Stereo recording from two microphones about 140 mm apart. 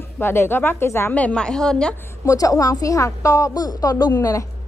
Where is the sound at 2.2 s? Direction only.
25° left (ahead or behind).